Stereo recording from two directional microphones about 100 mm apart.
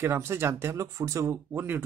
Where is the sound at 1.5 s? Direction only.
20° right (ahead or behind).